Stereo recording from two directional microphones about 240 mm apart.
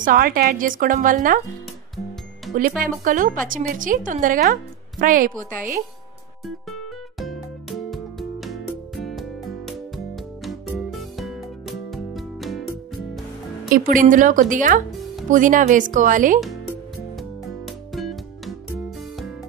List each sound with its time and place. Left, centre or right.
0.0 s a woman's voice: right
2.8 s a woman's voice: right
6.4 s music: centre
13.7 s a woman's voice: right
14.9 s music: centre
15.2 s a woman's voice: right
17.2 s music: centre